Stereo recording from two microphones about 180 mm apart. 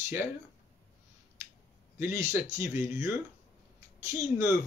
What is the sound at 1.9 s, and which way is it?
Speech, 15° right (ahead or behind).